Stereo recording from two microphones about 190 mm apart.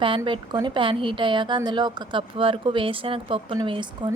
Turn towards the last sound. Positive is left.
turn(degrees=-25)  # may be behind; listen again after turning